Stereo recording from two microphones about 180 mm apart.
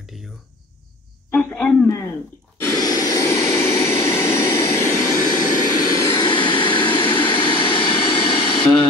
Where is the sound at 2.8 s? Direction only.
20° left (ahead or behind).